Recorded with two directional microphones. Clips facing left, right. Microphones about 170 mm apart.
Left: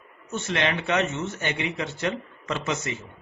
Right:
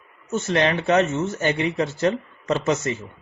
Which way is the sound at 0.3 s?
40° right (ahead or behind).